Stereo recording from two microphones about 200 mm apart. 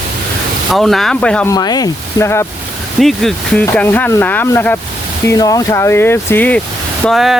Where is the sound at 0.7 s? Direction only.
Centre (ahead or behind).